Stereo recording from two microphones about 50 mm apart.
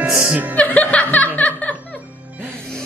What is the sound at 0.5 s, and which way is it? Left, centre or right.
Music, left.